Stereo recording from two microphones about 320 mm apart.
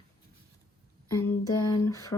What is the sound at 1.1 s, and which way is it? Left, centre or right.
Speech, centre.